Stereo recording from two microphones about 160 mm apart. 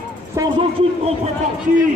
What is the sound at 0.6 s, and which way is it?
Speech, 40° right (ahead or behind).